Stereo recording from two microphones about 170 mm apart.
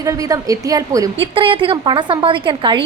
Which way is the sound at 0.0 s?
20° right (ahead or behind).